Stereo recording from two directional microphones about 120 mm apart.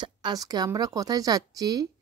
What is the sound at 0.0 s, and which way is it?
A woman's voice, 35° right (ahead or behind).